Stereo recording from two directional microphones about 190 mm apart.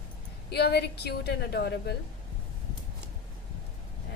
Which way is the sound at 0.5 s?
60° left (ahead or behind).